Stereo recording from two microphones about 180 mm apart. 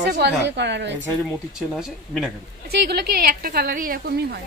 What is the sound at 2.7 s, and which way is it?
Speech, 60° right (ahead or behind).